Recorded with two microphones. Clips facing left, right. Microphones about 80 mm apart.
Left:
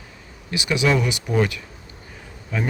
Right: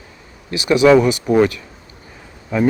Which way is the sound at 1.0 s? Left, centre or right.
Right.